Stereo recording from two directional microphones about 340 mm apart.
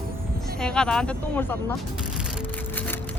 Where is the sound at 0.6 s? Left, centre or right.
Centre.